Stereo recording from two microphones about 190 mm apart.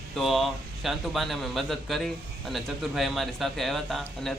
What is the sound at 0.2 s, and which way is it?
Speech, centre (ahead or behind).